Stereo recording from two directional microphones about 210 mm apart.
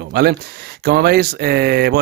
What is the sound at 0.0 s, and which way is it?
Speech, 50° right (ahead or behind).